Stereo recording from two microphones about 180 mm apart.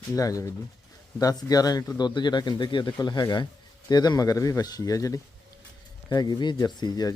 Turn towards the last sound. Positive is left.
turn(degrees=20)  # may be behind; listen again after turning